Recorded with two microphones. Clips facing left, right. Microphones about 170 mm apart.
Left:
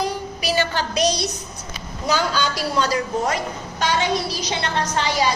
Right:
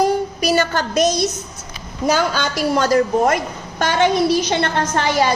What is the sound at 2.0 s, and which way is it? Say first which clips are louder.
A woman's voice: right 3 dB; 50° right (ahead or behind).